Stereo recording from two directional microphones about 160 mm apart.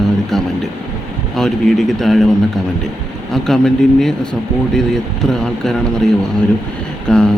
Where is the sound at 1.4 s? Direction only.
Centre (ahead or behind).